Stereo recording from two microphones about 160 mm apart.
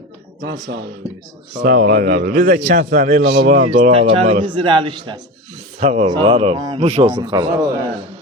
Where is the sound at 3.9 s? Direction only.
35° right (ahead or behind).